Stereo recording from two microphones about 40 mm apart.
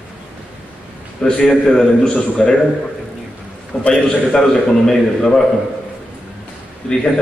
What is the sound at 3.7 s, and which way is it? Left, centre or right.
A man's voice, centre.